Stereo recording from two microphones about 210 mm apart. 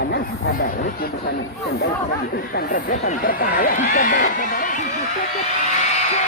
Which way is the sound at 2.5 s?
45° left (ahead or behind).